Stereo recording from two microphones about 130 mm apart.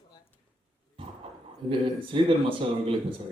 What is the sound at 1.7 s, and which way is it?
Speech, 40° right (ahead or behind).